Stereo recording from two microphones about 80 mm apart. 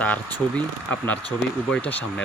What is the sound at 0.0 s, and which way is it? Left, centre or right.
Speech, centre.